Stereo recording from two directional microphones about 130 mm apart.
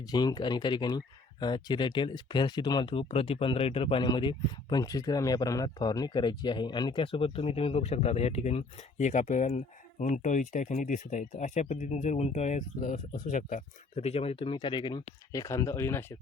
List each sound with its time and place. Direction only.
0.1 s speech: 30° left (ahead or behind)